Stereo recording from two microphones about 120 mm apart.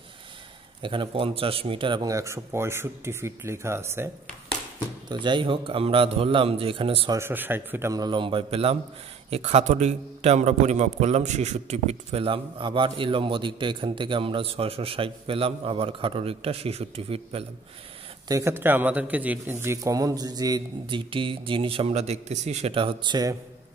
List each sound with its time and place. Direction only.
0.8 s a man's voice: 45° right (ahead or behind)
2.0 s a man's voice: 25° right (ahead or behind)
5.1 s a man's voice: 40° right (ahead or behind)
7.2 s a man's voice: 20° right (ahead or behind)
7.9 s a man's voice: 35° right (ahead or behind); by 17.5 s 55° right (ahead or behind)
18.3 s a man's voice: 20° right (ahead or behind)
20.8 s a man's voice: 45° right (ahead or behind)